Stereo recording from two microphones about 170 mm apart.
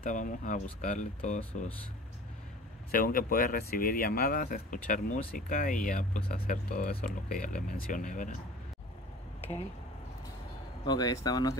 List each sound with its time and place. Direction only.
0.0 s speech: 50° left (ahead or behind)
2.9 s speech: 55° left (ahead or behind)
10.9 s speech: 20° left (ahead or behind)